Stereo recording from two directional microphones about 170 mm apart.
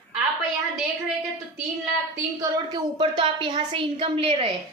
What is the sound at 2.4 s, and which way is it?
A woman's voice, 25° right (ahead or behind).